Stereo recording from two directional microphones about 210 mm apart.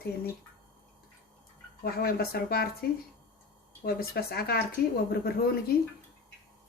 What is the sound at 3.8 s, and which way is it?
Speech, 45° left (ahead or behind).